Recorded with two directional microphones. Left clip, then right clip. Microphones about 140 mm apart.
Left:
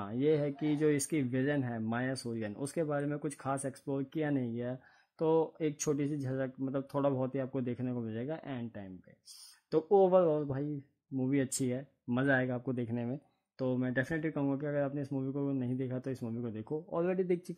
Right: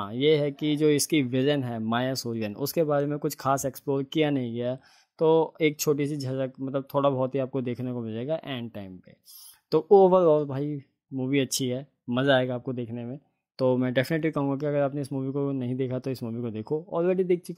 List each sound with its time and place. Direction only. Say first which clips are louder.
0.0 s speech: right 8 dB; 25° right (ahead or behind)
13.6 s speech: right 10 dB; 40° right (ahead or behind); by 17.6 s 20° right (ahead or behind)